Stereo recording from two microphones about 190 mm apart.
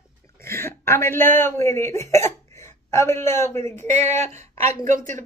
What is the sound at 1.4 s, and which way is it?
Speech, 15° left (ahead or behind).